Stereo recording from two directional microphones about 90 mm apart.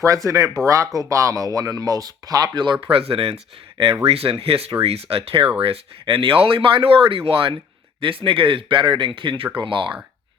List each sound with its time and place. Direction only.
0.0 s speech: 35° right (ahead or behind)
2.8 s speech: 90° right; by 9.9 s 65° right (ahead or behind)